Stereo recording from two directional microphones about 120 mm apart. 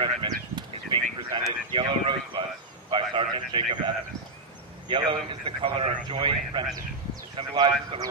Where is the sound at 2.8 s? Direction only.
45° right (ahead or behind).